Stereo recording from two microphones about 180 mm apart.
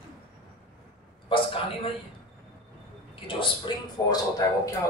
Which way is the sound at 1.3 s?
30° left (ahead or behind).